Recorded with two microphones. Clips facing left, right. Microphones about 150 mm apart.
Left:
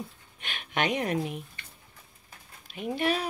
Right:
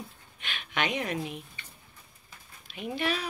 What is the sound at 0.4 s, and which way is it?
Speech, 45° left (ahead or behind).